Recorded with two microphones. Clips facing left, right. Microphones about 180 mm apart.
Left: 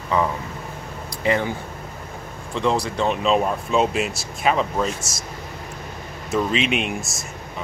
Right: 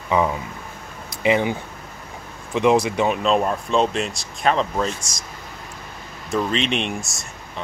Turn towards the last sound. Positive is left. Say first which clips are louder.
# even
turn(degrees=0)  # may be behind; listen again after turning